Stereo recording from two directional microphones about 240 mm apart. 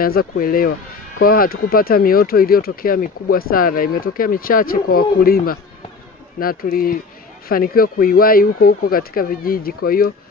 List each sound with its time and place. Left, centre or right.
0.0 s speech: left